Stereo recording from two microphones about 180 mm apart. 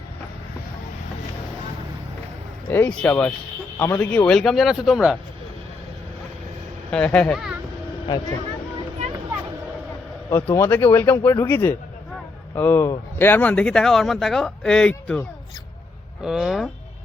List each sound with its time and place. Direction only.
2.6 s speech: 10° left (ahead or behind)
6.9 s speech: 5° left (ahead or behind)
8.0 s speech: 25° left (ahead or behind)
10.5 s speech: 10° left (ahead or behind)
16.2 s speech: 5° right (ahead or behind)